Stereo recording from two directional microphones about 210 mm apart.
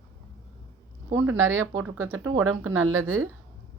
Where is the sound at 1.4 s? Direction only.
75° right (ahead or behind).